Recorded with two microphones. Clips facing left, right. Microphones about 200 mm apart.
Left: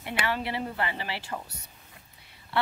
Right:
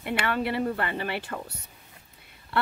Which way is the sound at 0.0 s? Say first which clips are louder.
Right 3 dB; 55° right (ahead or behind).